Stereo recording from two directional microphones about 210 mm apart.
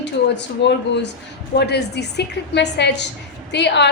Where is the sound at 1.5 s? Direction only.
50° left (ahead or behind).